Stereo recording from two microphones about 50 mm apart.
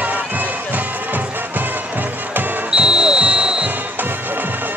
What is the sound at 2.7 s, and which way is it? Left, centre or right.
Music, centre.